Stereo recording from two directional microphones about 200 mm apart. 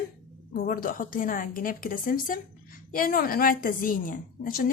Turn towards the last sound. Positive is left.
turn(degrees=45)  # may be behind; listen again after turning